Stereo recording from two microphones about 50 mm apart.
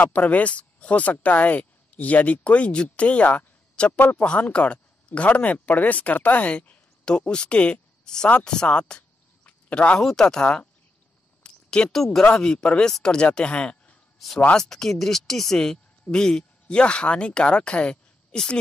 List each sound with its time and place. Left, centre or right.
0.0 s speech: left
9.5 s a sound: left
9.9 s speech: centre
11.4 s a sound: centre
11.9 s speech: centre
12.2 s speech: centre
14.1 s speech: centre